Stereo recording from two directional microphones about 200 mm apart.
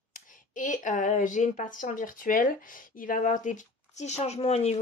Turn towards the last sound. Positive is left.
turn(degrees=30)  # may be behind; listen again after turning